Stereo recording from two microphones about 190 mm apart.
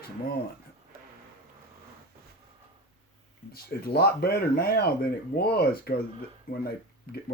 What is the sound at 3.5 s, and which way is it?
Speech, 55° left (ahead or behind).